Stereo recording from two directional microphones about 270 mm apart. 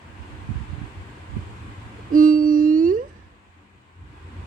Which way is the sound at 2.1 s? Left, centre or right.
Right.